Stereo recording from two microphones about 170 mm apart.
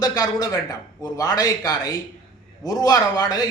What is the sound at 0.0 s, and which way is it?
A man's voice, 25° left (ahead or behind).